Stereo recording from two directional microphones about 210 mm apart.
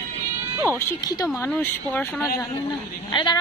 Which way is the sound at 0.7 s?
15° left (ahead or behind).